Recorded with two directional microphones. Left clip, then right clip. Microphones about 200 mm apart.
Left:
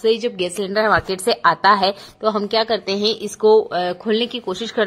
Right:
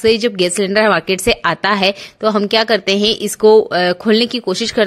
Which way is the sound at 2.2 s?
45° right (ahead or behind).